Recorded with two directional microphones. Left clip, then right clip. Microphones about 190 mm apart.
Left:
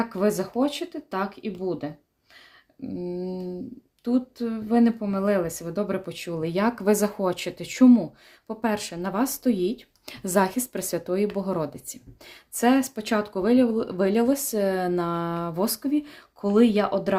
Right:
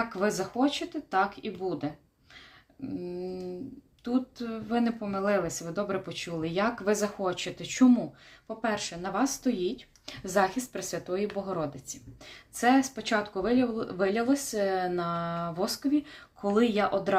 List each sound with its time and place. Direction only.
0.1 s speech: 45° left (ahead or behind)
3.2 s speech: 40° left (ahead or behind)